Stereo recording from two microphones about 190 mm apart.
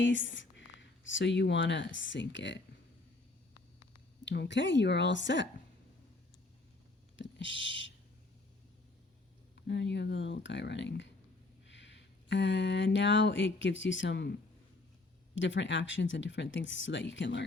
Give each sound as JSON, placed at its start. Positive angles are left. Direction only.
{"t": 0.0, "sound": "speech", "side_deg": 80}
{"t": 4.3, "sound": "speech", "side_deg": 70}
{"t": 7.2, "sound": "a sound", "side_deg": 70}
{"t": 9.6, "sound": "speech", "side_deg": 65}
{"t": 15.4, "sound": "speech", "side_deg": 75}